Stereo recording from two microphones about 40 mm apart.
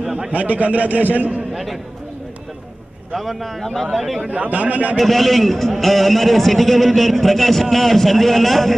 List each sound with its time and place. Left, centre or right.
0.3 s a man's voice: right
1.5 s speech: centre
3.2 s a man's voice: centre
4.3 s a man's voice: right
4.9 s a man's voice: centre